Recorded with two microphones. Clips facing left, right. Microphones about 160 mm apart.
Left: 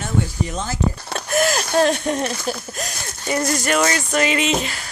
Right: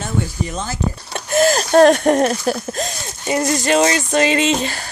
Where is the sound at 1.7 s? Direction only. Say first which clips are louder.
Right 9 dB; 55° right (ahead or behind).